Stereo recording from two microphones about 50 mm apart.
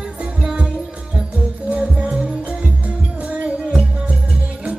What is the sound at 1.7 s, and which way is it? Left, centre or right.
Music, right.